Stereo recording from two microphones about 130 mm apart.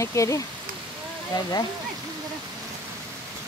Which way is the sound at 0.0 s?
25° left (ahead or behind).